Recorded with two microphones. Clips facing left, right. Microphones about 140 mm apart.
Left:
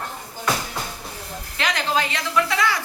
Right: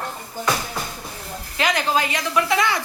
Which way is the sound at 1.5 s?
5° right (ahead or behind).